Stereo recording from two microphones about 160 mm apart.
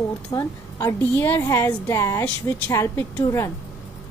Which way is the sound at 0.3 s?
20° left (ahead or behind).